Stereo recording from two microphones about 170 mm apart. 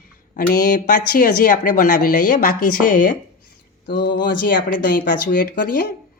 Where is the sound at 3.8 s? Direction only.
70° left (ahead or behind).